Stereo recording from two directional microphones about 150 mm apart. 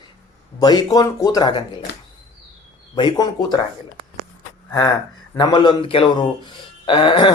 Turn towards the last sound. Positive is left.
turn(degrees=35)  # may be behind; listen again after turning